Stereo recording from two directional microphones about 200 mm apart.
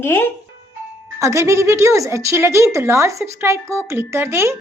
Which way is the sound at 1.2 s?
15° right (ahead or behind).